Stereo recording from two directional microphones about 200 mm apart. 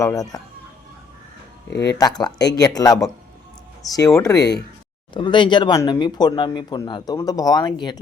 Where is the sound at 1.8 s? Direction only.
20° left (ahead or behind).